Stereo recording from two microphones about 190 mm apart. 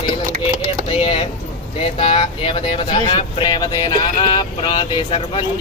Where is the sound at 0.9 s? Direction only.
30° left (ahead or behind).